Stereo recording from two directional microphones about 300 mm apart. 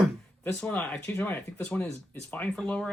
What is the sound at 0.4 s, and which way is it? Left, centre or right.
Speech, centre.